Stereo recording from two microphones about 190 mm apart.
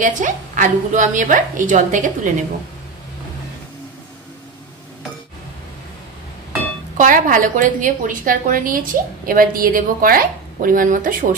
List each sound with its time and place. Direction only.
0.0 s a woman's voice: 40° right (ahead or behind)
7.0 s a woman's voice: 45° right (ahead or behind)